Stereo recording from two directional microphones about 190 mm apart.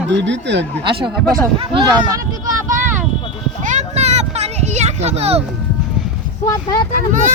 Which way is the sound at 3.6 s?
35° right (ahead or behind).